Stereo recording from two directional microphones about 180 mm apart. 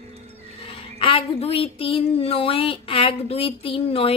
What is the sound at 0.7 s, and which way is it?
Speech, 30° left (ahead or behind).